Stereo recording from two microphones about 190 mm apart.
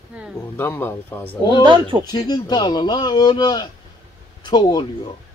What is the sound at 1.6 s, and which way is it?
Speech, 25° right (ahead or behind).